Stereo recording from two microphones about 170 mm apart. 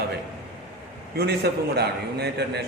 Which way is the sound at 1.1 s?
70° right (ahead or behind).